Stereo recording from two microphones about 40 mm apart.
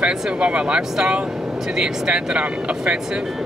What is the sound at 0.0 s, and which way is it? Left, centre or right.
Speech, right.